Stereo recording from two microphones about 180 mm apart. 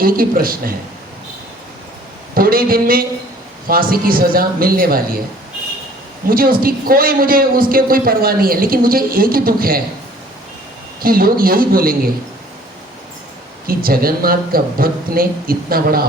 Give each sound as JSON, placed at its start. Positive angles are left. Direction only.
{"t": 0.0, "sound": "a man's voice", "side_deg": -55}
{"t": 2.3, "sound": "a man's voice", "side_deg": -55}
{"t": 6.2, "sound": "a man's voice", "side_deg": -55}
{"t": 11.0, "sound": "a man's voice", "side_deg": -55}
{"t": 13.7, "sound": "speech", "side_deg": -55}